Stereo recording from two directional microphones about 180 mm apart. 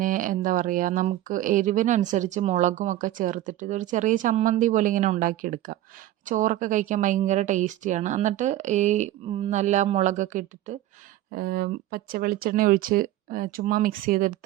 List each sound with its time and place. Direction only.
0.0 s a woman's voice: 50° right (ahead or behind)
11.3 s speech: 55° right (ahead or behind)